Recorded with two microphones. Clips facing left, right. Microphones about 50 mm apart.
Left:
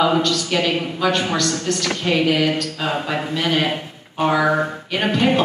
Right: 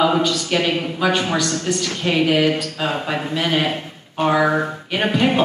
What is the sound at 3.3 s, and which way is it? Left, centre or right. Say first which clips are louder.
A man's voice: right 1 dB; centre.